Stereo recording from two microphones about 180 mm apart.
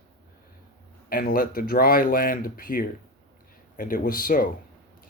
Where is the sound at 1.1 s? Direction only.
50° left (ahead or behind).